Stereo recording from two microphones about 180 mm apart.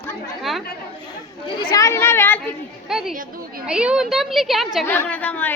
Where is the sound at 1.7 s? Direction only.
15° left (ahead or behind).